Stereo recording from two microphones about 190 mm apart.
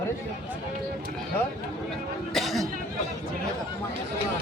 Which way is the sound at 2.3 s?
Centre (ahead or behind).